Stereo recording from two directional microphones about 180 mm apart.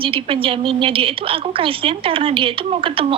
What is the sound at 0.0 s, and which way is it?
A woman's voice, 30° right (ahead or behind).